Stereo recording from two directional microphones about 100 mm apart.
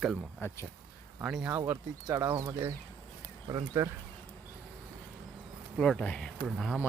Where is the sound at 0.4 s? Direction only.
30° left (ahead or behind).